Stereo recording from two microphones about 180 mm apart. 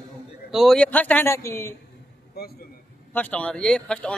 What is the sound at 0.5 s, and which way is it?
A man's voice, centre (ahead or behind).